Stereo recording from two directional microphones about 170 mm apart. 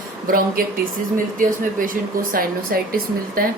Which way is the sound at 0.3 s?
60° right (ahead or behind).